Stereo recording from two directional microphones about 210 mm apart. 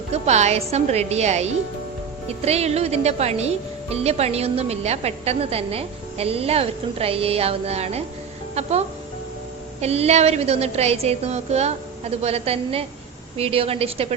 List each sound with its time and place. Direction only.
0.1 s a woman's voice: 30° right (ahead or behind)
9.8 s speech: 30° right (ahead or behind)